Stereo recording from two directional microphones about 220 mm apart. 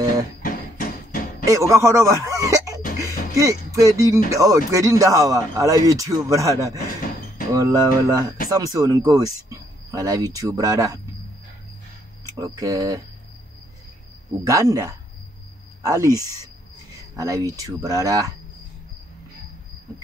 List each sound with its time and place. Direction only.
0.4 s hammer: 40° left (ahead or behind)
1.4 s speech: 15° right (ahead or behind)
3.0 s music: 15° right (ahead or behind)
4.3 s speech: 15° right (ahead or behind)
12.4 s speech: 15° right (ahead or behind)
14.4 s speech: 15° right (ahead or behind)